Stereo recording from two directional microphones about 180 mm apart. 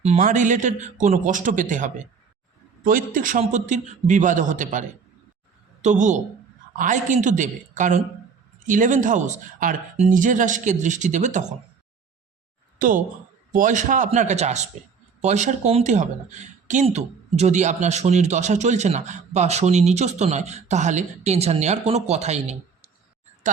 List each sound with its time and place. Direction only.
0.0 s speech: 40° right (ahead or behind)
12.8 s speech: 50° right (ahead or behind)